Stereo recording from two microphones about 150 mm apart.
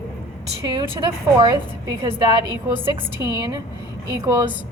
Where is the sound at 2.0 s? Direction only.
40° right (ahead or behind).